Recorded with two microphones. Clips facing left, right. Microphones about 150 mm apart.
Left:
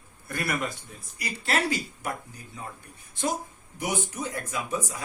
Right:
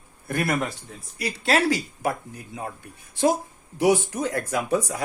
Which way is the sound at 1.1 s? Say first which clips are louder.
Right 6 dB; 75° right (ahead or behind).